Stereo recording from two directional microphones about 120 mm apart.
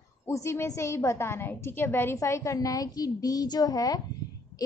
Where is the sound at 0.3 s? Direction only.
25° left (ahead or behind).